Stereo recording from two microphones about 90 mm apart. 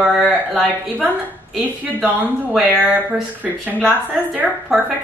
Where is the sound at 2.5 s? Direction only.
5° right (ahead or behind).